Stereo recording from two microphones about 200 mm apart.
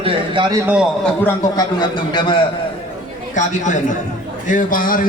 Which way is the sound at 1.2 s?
20° left (ahead or behind).